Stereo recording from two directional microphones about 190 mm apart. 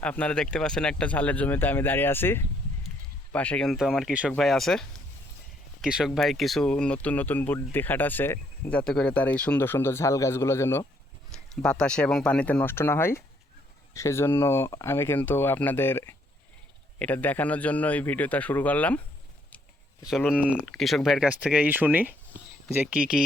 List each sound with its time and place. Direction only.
0.0 s speech: 5° left (ahead or behind)
20.1 s speech: centre (ahead or behind)